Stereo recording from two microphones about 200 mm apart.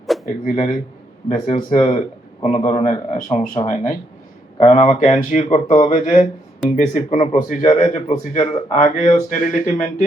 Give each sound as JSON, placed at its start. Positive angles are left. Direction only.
{"t": 0.1, "sound": "a sound", "side_deg": 0}
{"t": 0.4, "sound": "speech", "side_deg": 40}
{"t": 2.4, "sound": "speech", "side_deg": 30}